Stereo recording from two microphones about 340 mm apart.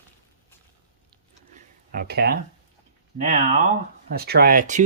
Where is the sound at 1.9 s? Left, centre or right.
Right.